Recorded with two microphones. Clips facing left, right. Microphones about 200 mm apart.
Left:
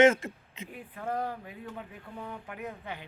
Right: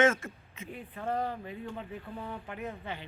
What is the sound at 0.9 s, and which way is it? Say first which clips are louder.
A man's voice: even; 5° left (ahead or behind).